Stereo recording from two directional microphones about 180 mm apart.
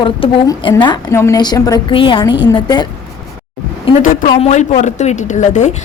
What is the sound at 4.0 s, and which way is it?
A woman's voice, 50° left (ahead or behind).